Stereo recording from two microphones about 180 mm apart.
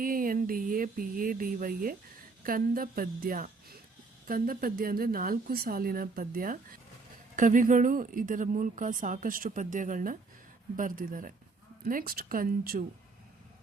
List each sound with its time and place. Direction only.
0.0 s a woman's voice: 50° right (ahead or behind)